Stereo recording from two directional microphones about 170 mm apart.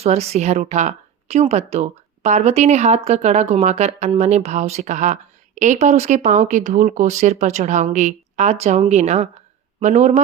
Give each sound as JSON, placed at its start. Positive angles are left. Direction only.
{"t": 0.0, "sound": "speech", "side_deg": -40}